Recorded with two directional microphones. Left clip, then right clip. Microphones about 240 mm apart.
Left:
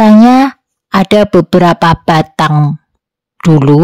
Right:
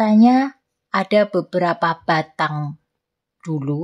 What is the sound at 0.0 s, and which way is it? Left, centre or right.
Speech, left.